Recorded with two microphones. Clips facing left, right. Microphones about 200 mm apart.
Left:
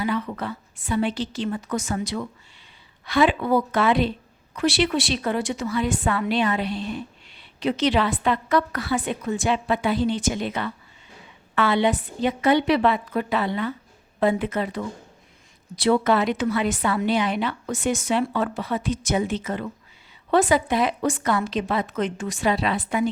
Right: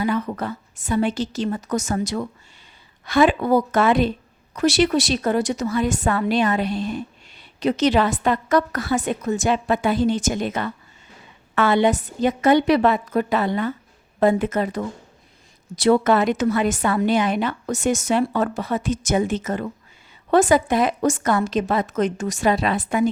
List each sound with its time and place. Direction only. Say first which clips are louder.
0.0 s a woman's voice: right 3 dB; 45° right (ahead or behind)